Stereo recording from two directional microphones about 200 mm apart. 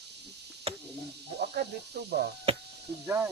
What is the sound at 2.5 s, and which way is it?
Speech, 30° right (ahead or behind).